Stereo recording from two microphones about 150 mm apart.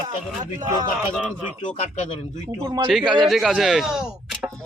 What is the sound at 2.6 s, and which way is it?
Speech, 25° right (ahead or behind).